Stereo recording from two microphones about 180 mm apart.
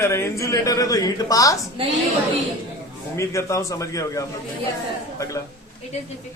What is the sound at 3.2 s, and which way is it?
A man's voice, 15° left (ahead or behind).